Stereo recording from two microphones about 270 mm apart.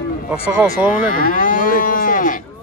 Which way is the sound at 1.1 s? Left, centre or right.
Left.